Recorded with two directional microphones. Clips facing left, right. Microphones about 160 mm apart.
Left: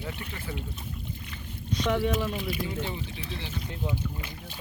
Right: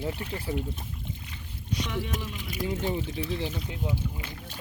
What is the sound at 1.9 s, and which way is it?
Speech, 45° left (ahead or behind).